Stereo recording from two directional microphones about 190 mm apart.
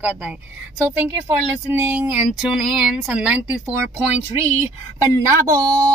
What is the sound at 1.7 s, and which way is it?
Speech, 10° right (ahead or behind).